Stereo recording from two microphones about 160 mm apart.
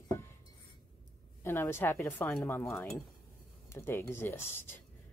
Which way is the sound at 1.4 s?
15° left (ahead or behind).